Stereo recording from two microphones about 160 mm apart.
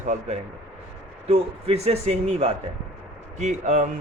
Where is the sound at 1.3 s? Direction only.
40° right (ahead or behind).